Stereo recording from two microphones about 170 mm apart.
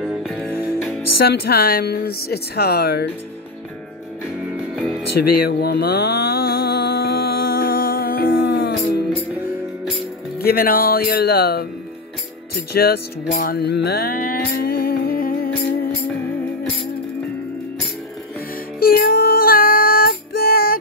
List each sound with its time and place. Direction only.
0.0 s music: 5° right (ahead or behind)
1.1 s speech: 65° left (ahead or behind)
4.7 s music: centre (ahead or behind)
5.4 s music: 65° left (ahead or behind)
10.4 s speech: 60° left (ahead or behind)
13.3 s music: 60° left (ahead or behind)
18.8 s music: 60° left (ahead or behind)